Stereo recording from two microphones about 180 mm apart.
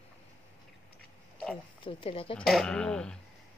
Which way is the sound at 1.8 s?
30° left (ahead or behind).